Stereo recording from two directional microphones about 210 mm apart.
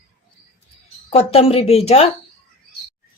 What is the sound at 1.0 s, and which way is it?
A woman's voice, 25° left (ahead or behind).